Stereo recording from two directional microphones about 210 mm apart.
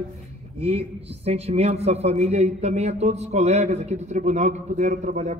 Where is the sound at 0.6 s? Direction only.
30° right (ahead or behind).